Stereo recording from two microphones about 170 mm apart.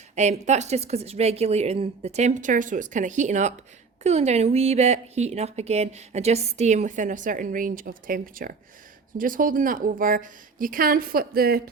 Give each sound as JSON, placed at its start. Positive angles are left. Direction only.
{"t": 0.2, "sound": "a woman's voice", "side_deg": -40}